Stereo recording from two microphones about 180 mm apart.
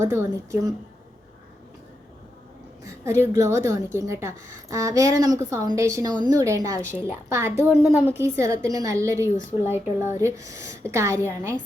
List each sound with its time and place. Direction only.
0.0 s a woman's voice: 15° right (ahead or behind)
2.8 s a woman's voice: 15° right (ahead or behind)